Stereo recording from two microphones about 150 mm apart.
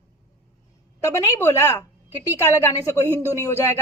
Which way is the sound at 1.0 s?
20° left (ahead or behind).